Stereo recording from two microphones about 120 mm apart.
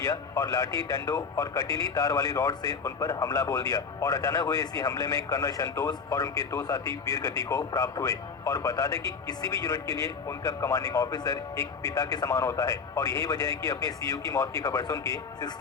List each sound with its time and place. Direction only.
0.0 s speech: 25° left (ahead or behind)